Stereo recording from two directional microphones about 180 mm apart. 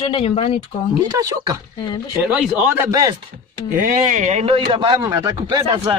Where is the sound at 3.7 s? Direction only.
45° right (ahead or behind); by 6.0 s 30° right (ahead or behind).